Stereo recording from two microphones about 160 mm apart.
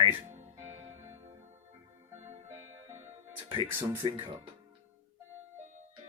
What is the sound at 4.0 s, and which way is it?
Speech, 30° right (ahead or behind).